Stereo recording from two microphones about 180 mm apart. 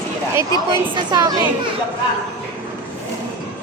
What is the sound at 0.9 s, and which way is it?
Speech, 20° right (ahead or behind).